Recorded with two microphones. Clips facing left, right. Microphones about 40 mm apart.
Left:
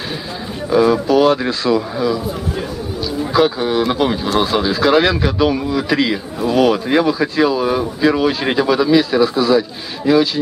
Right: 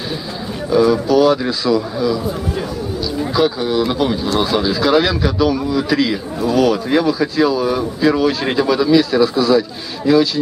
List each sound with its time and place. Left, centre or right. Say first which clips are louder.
0.7 s speech: even; centre
1.0 s speech: even; left
3.3 s speech: left 2 dB; left